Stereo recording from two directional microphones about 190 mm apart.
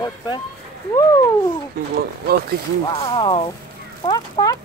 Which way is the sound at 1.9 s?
55° right (ahead or behind).